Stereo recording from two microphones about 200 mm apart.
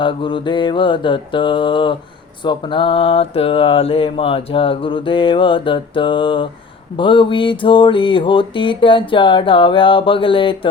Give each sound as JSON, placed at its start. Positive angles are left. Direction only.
{"t": 0.0, "sound": "mantra", "side_deg": 25}